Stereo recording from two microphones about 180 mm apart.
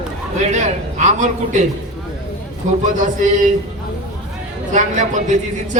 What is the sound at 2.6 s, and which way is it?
Speech, 45° right (ahead or behind).